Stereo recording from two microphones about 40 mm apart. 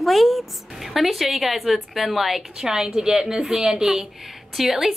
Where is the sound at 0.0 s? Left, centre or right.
Centre.